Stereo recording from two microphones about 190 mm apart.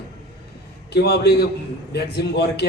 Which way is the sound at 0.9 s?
60° left (ahead or behind).